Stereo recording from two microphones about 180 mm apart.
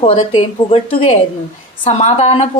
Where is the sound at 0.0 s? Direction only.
30° left (ahead or behind).